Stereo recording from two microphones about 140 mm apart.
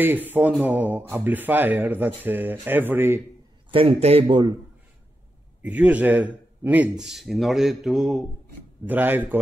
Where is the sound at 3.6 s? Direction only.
40° right (ahead or behind).